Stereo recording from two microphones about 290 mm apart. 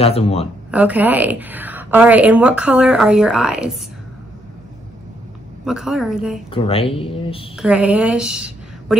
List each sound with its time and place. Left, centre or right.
0.0 s speech: left
0.7 s a woman's voice: centre
5.7 s a woman's voice: centre
6.5 s speech: centre
7.5 s a woman's voice: centre